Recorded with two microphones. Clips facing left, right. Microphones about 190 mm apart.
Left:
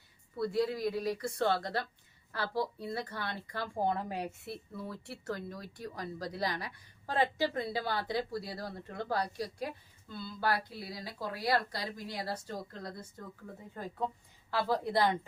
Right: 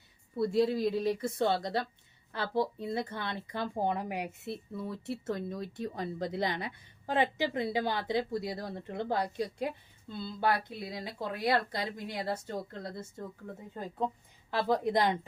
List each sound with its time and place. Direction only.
0.3 s a woman's voice: 25° right (ahead or behind)
14.5 s a woman's voice: 20° right (ahead or behind)